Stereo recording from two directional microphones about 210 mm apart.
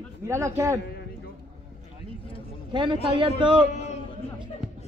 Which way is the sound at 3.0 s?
25° right (ahead or behind).